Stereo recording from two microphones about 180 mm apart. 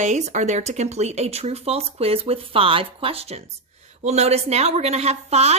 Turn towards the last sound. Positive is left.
turn(degrees=-35)  # may be behind; listen again after turning